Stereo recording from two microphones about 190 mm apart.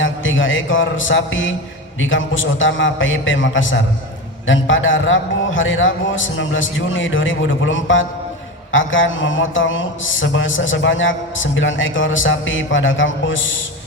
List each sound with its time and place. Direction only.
0.0 s a man's voice: 90° left
4.4 s mantra: 90° left